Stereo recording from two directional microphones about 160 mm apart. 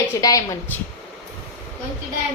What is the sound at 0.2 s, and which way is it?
Speech, 20° left (ahead or behind).